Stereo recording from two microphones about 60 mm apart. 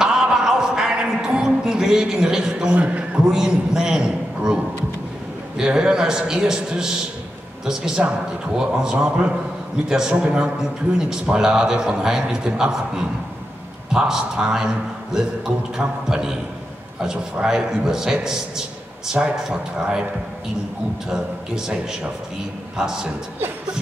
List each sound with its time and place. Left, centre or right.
0.0 s a sound: centre
2.7 s a man's voice: right
3.3 s a man's voice: centre
21.1 s a man's voice: centre
22.8 s a man's voice: centre